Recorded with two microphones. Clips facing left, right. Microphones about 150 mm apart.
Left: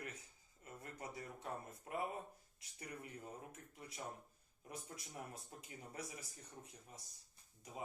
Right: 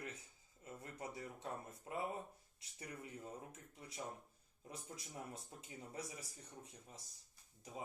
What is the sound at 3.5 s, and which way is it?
Speech, 25° right (ahead or behind).